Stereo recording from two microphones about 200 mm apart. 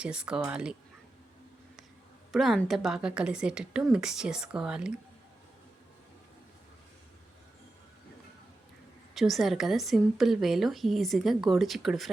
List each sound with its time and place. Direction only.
0.0 s a woman's voice: 5° right (ahead or behind)
2.3 s a woman's voice: centre (ahead or behind)
9.1 s a woman's voice: centre (ahead or behind)